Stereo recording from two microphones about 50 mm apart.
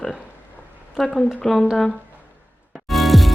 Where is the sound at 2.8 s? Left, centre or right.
Centre.